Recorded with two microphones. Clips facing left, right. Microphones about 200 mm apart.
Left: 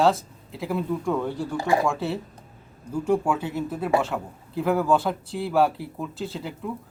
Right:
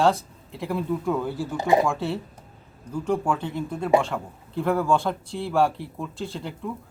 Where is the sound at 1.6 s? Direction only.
20° right (ahead or behind).